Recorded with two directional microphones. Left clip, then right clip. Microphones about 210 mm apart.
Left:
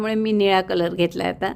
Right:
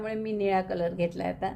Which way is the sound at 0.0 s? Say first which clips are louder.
Left 9 dB; 40° left (ahead or behind).